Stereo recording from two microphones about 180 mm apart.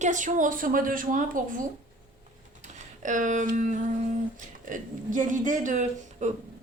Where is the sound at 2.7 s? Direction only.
45° right (ahead or behind).